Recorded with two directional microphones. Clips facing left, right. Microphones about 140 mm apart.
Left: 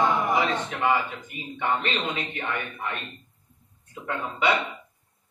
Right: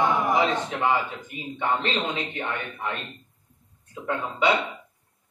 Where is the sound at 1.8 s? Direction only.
20° right (ahead or behind).